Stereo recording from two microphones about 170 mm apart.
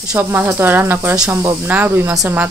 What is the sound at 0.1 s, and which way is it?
A woman's voice, 10° right (ahead or behind).